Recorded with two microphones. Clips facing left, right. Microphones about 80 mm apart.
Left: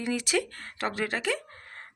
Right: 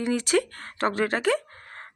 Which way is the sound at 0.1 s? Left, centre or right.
Right.